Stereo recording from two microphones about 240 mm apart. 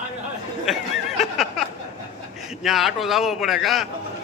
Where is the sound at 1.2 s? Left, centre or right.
Centre.